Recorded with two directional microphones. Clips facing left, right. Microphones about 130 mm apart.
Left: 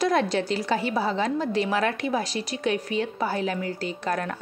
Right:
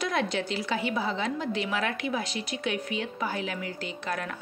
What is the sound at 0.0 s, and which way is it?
A woman's voice, 40° left (ahead or behind).